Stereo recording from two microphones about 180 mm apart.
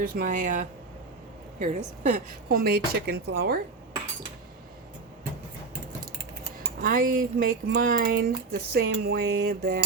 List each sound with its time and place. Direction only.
0.1 s speech: 45° right (ahead or behind)
6.6 s speech: 50° right (ahead or behind)